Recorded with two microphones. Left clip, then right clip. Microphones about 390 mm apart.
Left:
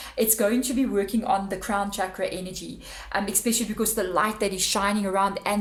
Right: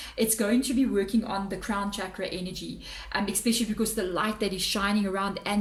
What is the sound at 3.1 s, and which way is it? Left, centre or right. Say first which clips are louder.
A woman's voice: left 2 dB; centre.